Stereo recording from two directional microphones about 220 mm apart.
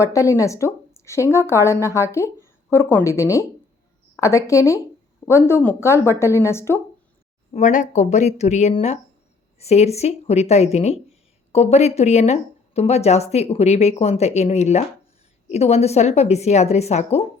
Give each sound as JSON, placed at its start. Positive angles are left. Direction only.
{"t": 0.0, "sound": "speech", "side_deg": 15}
{"t": 7.5, "sound": "speech", "side_deg": 35}